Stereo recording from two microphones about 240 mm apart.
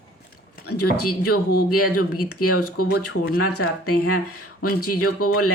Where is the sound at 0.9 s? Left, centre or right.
Left.